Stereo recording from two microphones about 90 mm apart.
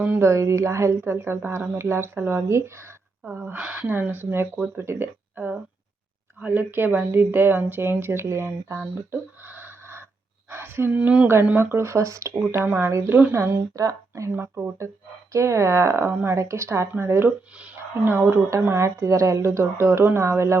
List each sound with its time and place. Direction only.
0.2 s a woman's voice: 35° right (ahead or behind)
9.5 s a sound: 25° right (ahead or behind)
10.5 s speech: 25° right (ahead or behind)
12.6 s a woman's voice: 15° right (ahead or behind)
12.9 s speech: 35° right (ahead or behind)
14.3 s a woman's voice: 25° right (ahead or behind)